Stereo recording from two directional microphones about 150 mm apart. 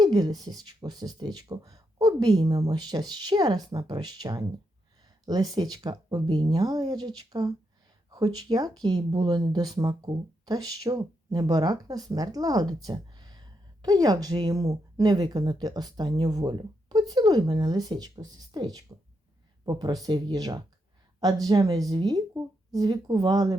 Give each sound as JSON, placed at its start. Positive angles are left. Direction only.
{"t": 0.0, "sound": "speech", "side_deg": -25}